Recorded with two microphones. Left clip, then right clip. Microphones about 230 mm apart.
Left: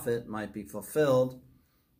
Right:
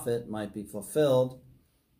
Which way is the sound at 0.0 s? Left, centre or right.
Centre.